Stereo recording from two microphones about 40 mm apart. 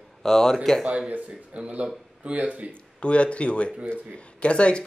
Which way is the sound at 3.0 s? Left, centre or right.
Left.